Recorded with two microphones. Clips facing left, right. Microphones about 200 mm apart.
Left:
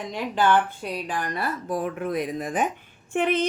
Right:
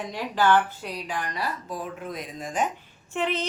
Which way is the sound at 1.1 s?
55° left (ahead or behind).